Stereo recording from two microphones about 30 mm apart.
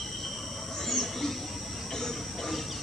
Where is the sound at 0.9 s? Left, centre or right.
Centre.